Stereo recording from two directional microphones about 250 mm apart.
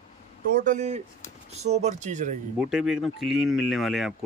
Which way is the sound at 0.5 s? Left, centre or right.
Right.